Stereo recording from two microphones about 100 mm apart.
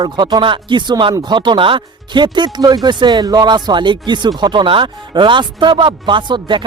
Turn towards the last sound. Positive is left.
turn(degrees=-55)  # may be behind; listen again after turning